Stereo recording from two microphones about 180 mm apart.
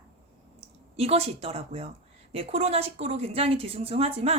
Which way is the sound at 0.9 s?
35° right (ahead or behind).